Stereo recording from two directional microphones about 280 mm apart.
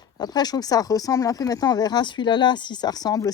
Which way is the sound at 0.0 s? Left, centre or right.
Centre.